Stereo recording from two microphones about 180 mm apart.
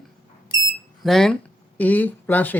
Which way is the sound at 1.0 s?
Centre (ahead or behind).